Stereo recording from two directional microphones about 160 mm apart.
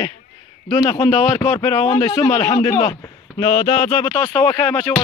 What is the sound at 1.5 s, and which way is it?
Speech, 40° left (ahead or behind).